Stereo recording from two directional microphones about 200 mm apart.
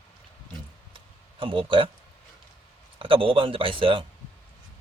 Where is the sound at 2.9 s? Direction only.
25° right (ahead or behind).